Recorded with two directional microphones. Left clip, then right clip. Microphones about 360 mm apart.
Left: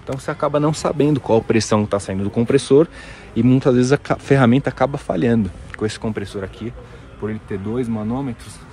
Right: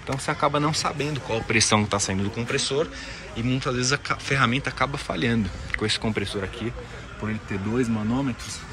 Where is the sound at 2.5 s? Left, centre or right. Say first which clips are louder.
Left 11 dB; centre.